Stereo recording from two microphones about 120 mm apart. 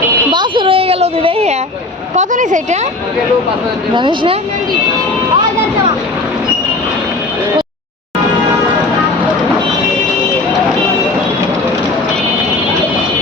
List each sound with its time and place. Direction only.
0.3 s a sound: 40° right (ahead or behind); by 1.5 s 60° right (ahead or behind)
2.1 s a woman's voice: 90° right
3.9 s speech: 40° right (ahead or behind)